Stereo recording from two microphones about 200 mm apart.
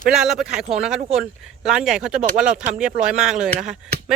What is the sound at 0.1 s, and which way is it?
Speech, centre (ahead or behind).